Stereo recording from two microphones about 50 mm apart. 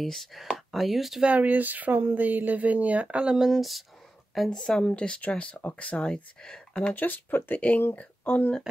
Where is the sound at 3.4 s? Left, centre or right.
Centre.